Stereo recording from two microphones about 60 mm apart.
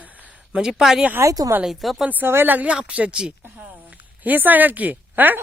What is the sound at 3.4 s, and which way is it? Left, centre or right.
A woman's voice, right.